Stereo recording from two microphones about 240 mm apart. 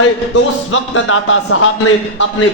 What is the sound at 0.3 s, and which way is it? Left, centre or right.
A man's voice, left.